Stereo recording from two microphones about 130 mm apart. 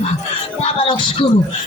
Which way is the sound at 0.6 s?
40° left (ahead or behind).